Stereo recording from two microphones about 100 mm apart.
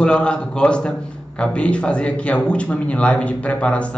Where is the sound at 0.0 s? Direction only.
10° left (ahead or behind).